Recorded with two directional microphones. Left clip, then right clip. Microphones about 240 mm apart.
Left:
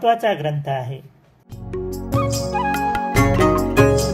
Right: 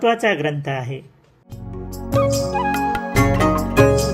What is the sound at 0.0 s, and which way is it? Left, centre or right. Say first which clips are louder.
Speech: even; right.